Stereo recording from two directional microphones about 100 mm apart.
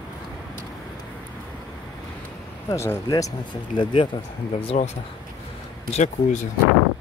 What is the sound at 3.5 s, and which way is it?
Speech, 50° left (ahead or behind).